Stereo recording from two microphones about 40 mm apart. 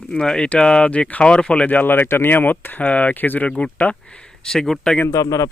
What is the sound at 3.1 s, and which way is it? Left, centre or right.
Speech, left.